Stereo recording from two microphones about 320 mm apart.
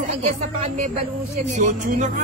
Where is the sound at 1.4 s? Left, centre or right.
Right.